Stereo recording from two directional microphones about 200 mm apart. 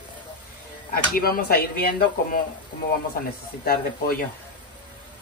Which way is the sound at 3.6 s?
50° left (ahead or behind).